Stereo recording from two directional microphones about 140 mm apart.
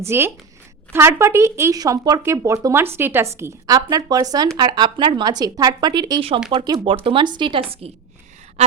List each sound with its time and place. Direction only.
0.0 s speech: 20° right (ahead or behind); by 7.6 s 35° right (ahead or behind)